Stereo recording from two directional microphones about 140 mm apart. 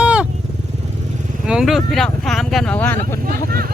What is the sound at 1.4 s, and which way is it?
Speech, 5° right (ahead or behind).